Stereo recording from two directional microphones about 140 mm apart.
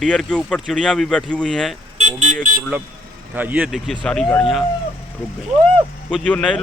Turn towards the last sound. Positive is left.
turn(degrees=5)  # may be behind; listen again after turning